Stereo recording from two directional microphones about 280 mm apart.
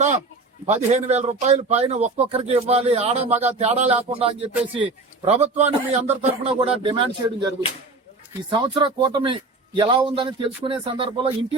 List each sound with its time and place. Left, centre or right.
0.6 s a man's voice: right